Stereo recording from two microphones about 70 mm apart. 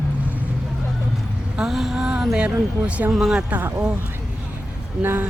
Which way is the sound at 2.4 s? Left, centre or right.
Centre.